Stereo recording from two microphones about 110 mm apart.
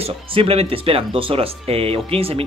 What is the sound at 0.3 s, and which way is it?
Speech, 60° right (ahead or behind).